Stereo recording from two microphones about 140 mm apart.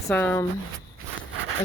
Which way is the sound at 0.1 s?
15° left (ahead or behind).